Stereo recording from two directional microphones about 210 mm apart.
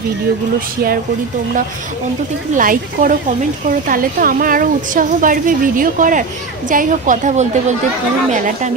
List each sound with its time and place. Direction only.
2.5 s a woman's voice: 40° right (ahead or behind)